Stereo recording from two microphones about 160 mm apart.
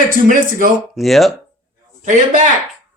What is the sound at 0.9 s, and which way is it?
Speech, centre (ahead or behind).